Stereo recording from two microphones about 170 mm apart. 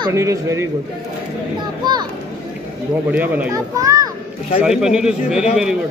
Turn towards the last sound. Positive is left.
turn(degrees=-5)  # may be behind; listen again after turning